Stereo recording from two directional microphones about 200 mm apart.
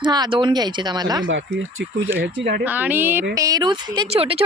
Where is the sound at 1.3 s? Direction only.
65° right (ahead or behind).